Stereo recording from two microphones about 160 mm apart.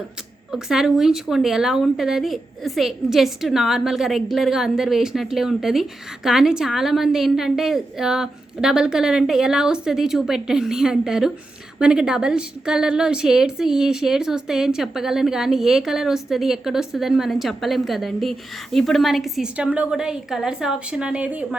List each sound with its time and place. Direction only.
0.5 s a woman's voice: 5° right (ahead or behind)